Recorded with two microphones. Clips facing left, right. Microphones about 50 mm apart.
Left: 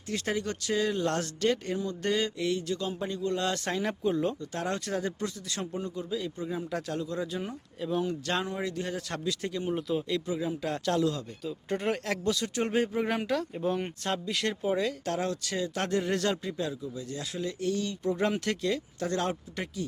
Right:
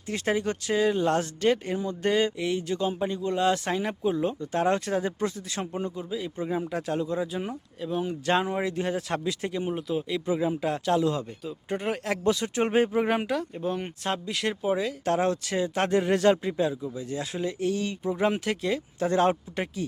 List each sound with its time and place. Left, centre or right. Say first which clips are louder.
0.1 s speech: right 4 dB; right
4.4 s speech: right 8 dB; right
5.2 s a man's voice: right 4 dB; right
6.0 s speech: right 2 dB; centre
7.8 s speech: even; centre
8.0 s speech: right 5 dB; centre
9.7 s speech: right 1 dB; centre
10.2 s speech: right 5 dB; right
10.7 s speech: right 2 dB; centre
12.2 s speech: right 4 dB; right
13.3 s speech: even; centre
15.0 s speech: right 6 dB; right
18.0 s speech: right 2 dB; centre; by 19.8 s right